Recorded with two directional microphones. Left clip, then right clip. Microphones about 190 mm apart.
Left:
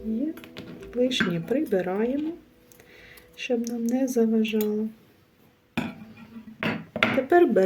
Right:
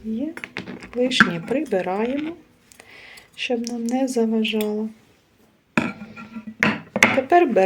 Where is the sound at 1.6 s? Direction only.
35° left (ahead or behind).